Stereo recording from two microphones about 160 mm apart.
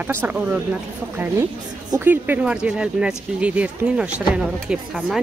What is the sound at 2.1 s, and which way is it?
Speech, 10° right (ahead or behind).